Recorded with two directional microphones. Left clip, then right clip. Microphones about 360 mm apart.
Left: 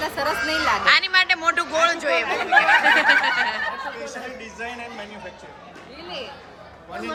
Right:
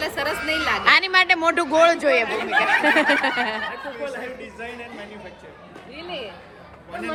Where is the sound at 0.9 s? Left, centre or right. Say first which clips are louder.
Right 2 dB; centre.